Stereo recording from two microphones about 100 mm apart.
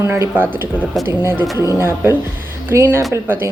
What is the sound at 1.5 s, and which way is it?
Speech, 35° left (ahead or behind).